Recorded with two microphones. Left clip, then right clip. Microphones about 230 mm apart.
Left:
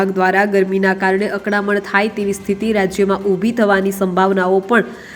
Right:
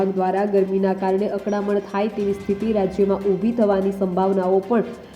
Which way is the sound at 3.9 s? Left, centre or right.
Left.